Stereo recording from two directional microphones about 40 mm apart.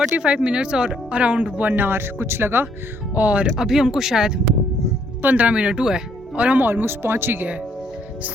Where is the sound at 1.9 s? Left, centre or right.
Right.